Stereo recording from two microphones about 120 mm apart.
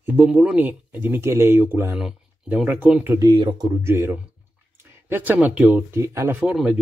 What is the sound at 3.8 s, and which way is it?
A man's voice, 20° right (ahead or behind).